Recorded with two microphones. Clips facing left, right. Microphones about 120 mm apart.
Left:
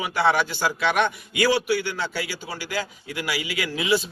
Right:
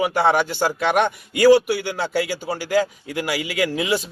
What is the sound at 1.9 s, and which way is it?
A man's voice, 55° right (ahead or behind).